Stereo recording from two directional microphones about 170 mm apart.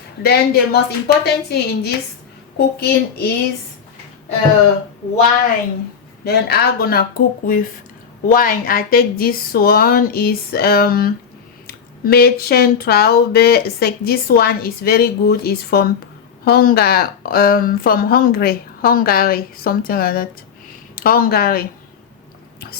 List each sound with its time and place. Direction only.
0.2 s a woman's voice: 70° left (ahead or behind)
6.2 s speech: 70° left (ahead or behind)